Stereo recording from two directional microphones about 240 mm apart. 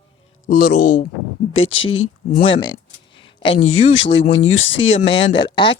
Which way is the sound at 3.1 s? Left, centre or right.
Left.